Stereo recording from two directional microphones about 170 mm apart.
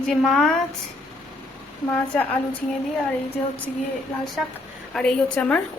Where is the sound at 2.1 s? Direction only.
10° left (ahead or behind).